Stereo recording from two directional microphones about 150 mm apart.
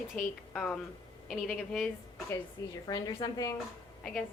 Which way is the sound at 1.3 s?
5° left (ahead or behind).